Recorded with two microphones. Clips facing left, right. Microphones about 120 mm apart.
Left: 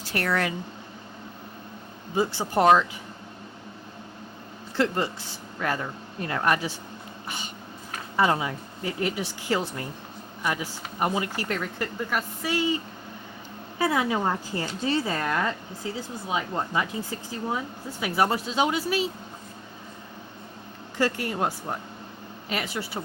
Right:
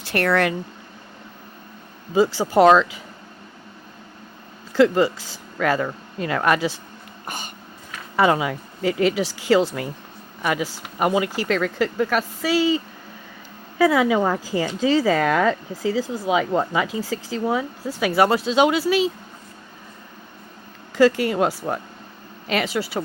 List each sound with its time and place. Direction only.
0.0 s speech: 65° right (ahead or behind)
2.1 s speech: 90° right
4.8 s speech: 90° right
7.3 s a sound: 45° right (ahead or behind)
8.1 s speech: 90° right
21.0 s speech: 90° right